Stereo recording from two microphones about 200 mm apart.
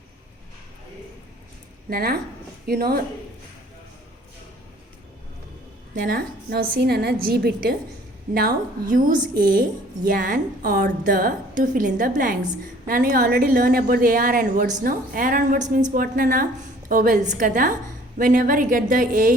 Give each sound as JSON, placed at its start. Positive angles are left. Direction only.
{"t": 1.9, "sound": "a woman's voice", "side_deg": -50}
{"t": 5.9, "sound": "a woman's voice", "side_deg": -45}